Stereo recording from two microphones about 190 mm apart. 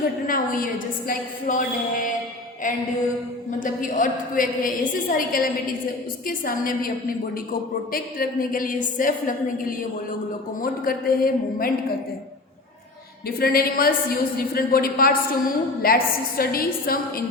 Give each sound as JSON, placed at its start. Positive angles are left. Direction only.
{"t": 0.3, "sound": "a woman's voice", "side_deg": 45}
{"t": 3.6, "sound": "a woman's voice", "side_deg": 45}
{"t": 7.9, "sound": "a woman's voice", "side_deg": 50}
{"t": 13.2, "sound": "a woman's voice", "side_deg": 50}